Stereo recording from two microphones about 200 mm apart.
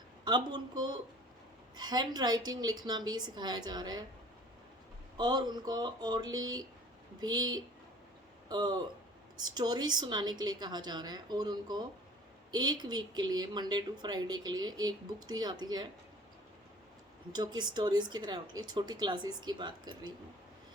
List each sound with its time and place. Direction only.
0.3 s a woman's voice: 20° right (ahead or behind)
5.1 s a woman's voice: 20° right (ahead or behind)
17.3 s a woman's voice: 20° right (ahead or behind)